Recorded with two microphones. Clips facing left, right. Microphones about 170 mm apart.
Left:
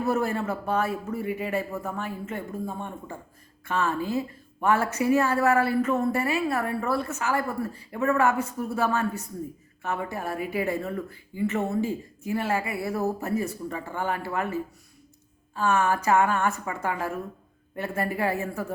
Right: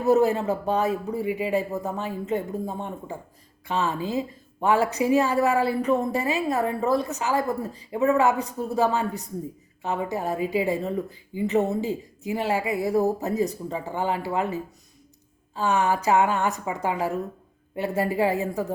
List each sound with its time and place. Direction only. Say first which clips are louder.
0.0 s speech: right 6 dB; 20° right (ahead or behind)